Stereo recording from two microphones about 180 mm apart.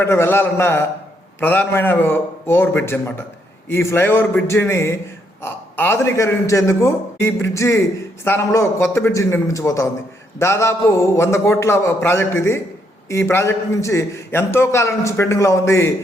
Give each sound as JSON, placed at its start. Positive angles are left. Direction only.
{"t": 0.0, "sound": "a man's voice", "side_deg": 15}